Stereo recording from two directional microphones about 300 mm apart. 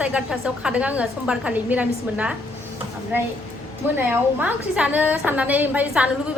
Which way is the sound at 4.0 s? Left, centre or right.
Centre.